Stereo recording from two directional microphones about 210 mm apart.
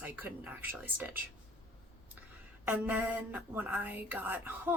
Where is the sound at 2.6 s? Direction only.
10° right (ahead or behind).